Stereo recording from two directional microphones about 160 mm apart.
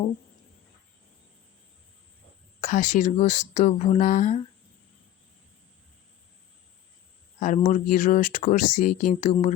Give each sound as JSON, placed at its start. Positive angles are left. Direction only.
{"t": 2.6, "sound": "speech", "side_deg": 50}
{"t": 7.3, "sound": "speech", "side_deg": 50}